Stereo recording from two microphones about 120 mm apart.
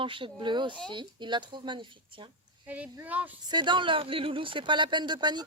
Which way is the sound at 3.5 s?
40° right (ahead or behind).